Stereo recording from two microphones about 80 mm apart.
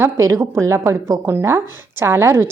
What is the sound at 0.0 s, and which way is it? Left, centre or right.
A woman's voice, right.